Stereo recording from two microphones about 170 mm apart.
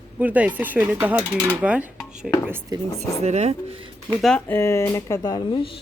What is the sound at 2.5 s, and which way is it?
Speech, 15° right (ahead or behind).